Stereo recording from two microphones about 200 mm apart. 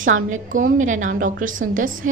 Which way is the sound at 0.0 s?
40° right (ahead or behind).